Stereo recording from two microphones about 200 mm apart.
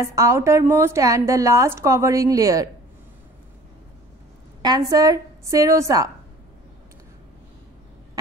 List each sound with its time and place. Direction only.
0.0 s a woman's voice: 15° right (ahead or behind)
4.6 s a woman's voice: 20° right (ahead or behind)